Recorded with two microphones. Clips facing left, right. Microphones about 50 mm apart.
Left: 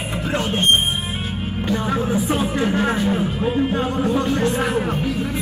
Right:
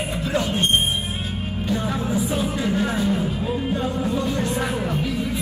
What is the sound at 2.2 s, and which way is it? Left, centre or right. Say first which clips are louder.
Music: left 3 dB; left.